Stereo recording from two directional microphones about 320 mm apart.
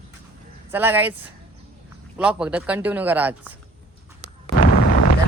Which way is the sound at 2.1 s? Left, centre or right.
Centre.